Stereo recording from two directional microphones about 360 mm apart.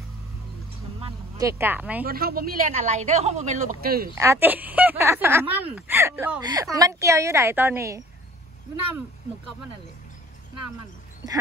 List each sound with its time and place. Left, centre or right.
1.0 s speech: centre
2.0 s speech: right
4.1 s speech: centre